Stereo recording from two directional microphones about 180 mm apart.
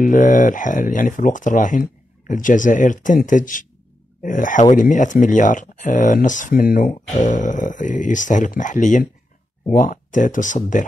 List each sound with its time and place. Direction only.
0.0 s speech: 45° left (ahead or behind)